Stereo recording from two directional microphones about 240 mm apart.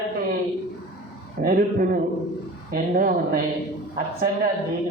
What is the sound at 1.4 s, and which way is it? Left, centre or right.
A man's voice, right.